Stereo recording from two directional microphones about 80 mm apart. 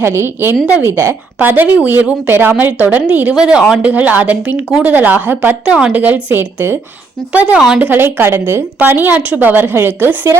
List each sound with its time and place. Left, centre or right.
0.0 s a woman's voice: right
0.6 s a man's voice: centre
0.9 s a woman's voice: right